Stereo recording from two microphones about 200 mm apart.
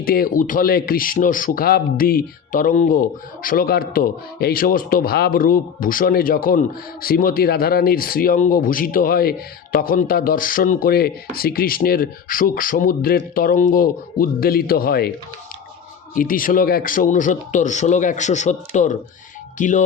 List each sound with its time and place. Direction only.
0.0 s speech: 45° left (ahead or behind)
16.1 s speech: 45° left (ahead or behind)